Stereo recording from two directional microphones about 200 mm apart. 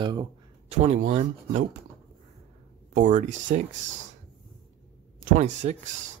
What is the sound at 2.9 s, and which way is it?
Speech, 40° right (ahead or behind).